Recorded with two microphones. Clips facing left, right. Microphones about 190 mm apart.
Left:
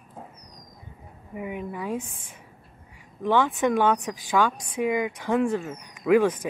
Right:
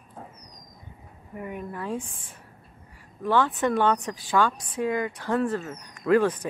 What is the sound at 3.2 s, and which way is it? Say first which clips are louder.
A woman's voice: left 1 dB; 15° left (ahead or behind).